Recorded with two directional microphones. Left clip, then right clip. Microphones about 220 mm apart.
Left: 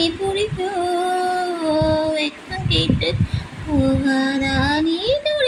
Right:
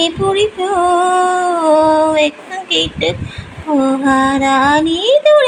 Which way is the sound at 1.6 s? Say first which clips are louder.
Right 9 dB; 35° right (ahead or behind).